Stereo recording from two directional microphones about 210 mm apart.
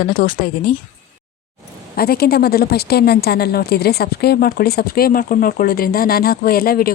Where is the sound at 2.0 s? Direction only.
45° left (ahead or behind).